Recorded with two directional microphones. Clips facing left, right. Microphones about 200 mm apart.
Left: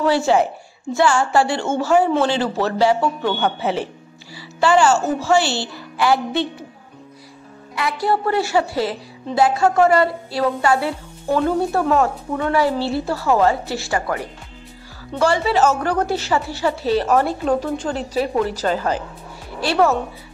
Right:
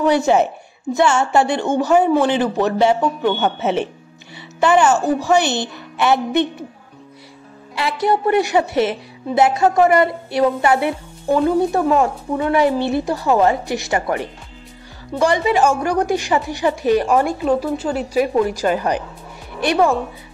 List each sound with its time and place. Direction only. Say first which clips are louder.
0.0 s a woman's voice: right 2 dB; 20° right (ahead or behind)
7.7 s a woman's voice: right 2 dB; 25° right (ahead or behind)